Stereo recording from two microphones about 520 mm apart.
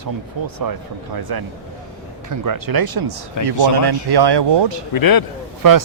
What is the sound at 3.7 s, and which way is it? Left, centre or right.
Speech, right.